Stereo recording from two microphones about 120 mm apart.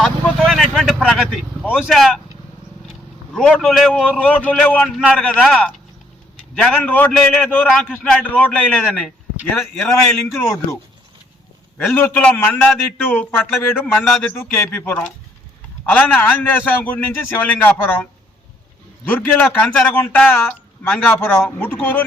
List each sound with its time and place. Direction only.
0.0 s vehicle: centre (ahead or behind)
1.7 s speech: centre (ahead or behind)
3.3 s a man's voice: 5° left (ahead or behind)
10.3 s speech: 20° left (ahead or behind)
11.9 s a man's voice: 15° left (ahead or behind)